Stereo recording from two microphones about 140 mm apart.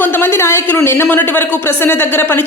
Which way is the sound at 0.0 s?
15° left (ahead or behind).